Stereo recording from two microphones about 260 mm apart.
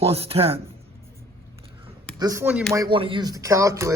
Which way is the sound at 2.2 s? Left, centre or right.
Centre.